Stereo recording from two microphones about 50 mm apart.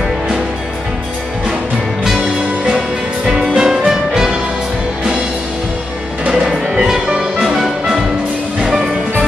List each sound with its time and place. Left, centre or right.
3.3 s music: centre
6.3 s music: centre